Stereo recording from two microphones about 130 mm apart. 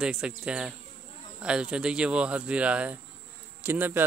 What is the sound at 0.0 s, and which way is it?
Speech, 5° right (ahead or behind).